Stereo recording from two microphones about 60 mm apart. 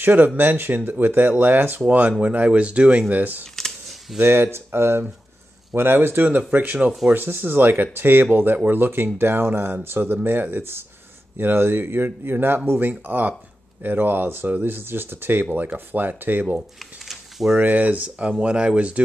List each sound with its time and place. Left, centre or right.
0.0 s speech: right
4.2 s speech: right
17.1 s a sound: centre
17.6 s speech: right